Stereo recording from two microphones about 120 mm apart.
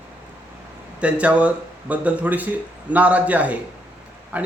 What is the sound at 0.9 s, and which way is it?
Speech, 10° right (ahead or behind).